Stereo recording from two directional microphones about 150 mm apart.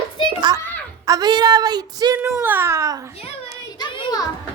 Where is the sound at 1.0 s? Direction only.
25° right (ahead or behind).